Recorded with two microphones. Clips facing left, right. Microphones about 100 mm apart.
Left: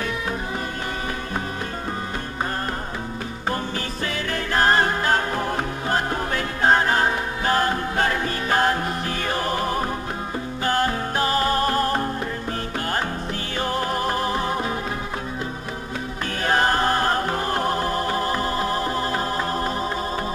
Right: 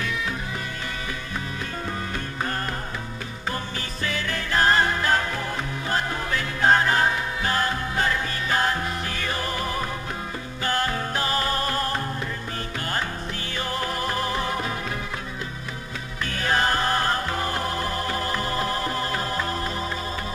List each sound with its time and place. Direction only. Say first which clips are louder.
4.0 s music: even; 45° left (ahead or behind)
13.7 s music: left 3 dB; 35° left (ahead or behind)
17.3 s music: left 4 dB; 40° left (ahead or behind)
18.1 s music: left 3 dB; 25° left (ahead or behind)